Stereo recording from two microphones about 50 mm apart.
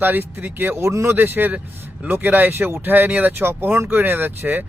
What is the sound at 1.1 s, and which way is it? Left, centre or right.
Speech, right.